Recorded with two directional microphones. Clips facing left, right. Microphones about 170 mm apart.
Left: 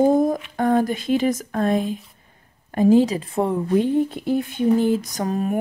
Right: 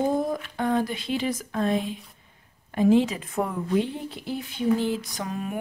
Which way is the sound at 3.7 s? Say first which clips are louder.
Left 7 dB; 45° left (ahead or behind).